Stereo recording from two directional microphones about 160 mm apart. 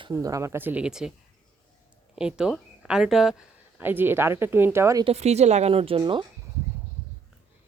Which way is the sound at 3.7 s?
10° right (ahead or behind).